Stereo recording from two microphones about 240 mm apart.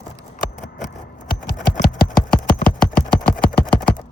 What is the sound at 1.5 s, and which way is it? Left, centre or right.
Engine, left.